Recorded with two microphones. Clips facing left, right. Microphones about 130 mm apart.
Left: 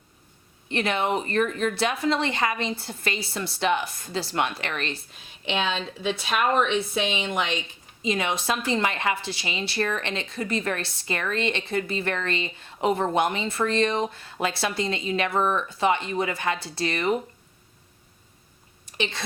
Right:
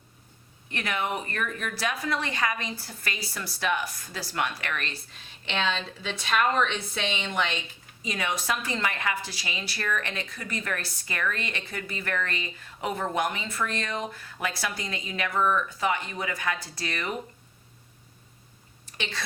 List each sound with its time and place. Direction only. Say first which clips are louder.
0.7 s a woman's voice: left 6 dB; 25° left (ahead or behind)
5.5 s speech: left 2 dB; 10° left (ahead or behind)
8.0 s a woman's voice: left 4 dB; 25° left (ahead or behind)
18.9 s a woman's voice: left 6 dB; 20° left (ahead or behind)